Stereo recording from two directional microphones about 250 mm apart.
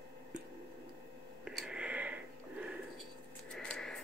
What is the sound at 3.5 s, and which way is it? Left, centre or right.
Sniff, centre.